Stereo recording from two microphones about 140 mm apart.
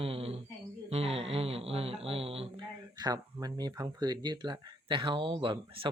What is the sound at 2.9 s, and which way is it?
Speech, 30° right (ahead or behind).